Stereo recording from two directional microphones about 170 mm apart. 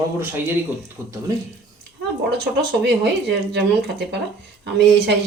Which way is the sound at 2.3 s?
75° right (ahead or behind).